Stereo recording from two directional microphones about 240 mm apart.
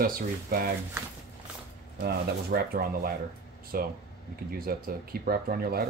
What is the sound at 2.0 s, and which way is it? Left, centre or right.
Speech, right.